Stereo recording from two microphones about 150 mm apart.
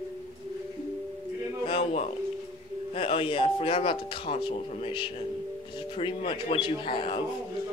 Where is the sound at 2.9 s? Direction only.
40° left (ahead or behind).